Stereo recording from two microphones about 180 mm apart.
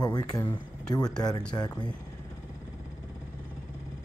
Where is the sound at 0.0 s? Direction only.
20° left (ahead or behind).